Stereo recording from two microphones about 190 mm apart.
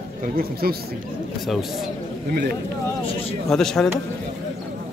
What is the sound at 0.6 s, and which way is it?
Speech, 50° right (ahead or behind).